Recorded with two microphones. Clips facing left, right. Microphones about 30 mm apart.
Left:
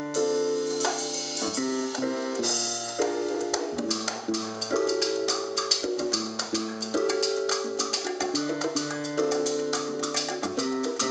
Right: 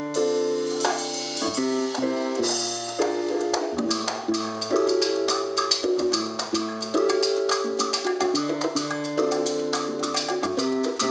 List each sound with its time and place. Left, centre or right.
0.1 s music: centre